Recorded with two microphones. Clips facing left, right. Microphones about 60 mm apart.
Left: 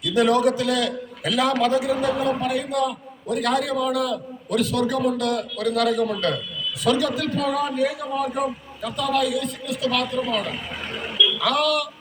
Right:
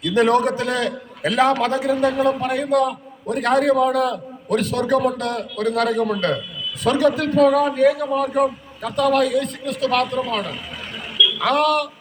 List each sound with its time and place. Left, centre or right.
0.0 s a man's voice: right
11.3 s a man's voice: right